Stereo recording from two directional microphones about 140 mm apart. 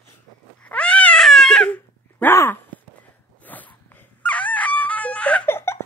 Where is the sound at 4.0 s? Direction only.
10° left (ahead or behind).